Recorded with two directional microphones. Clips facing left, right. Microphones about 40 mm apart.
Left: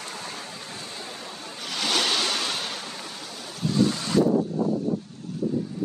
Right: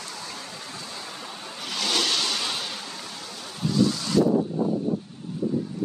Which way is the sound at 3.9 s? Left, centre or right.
Left.